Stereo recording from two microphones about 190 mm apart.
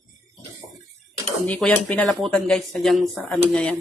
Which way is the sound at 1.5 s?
5° left (ahead or behind).